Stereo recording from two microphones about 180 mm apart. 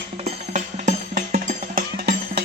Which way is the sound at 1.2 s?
50° right (ahead or behind).